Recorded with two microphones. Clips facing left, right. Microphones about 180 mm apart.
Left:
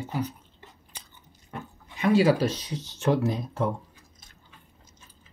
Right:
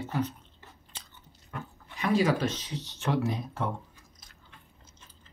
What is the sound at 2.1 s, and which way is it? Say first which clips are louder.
Speech: left 5 dB; 30° left (ahead or behind).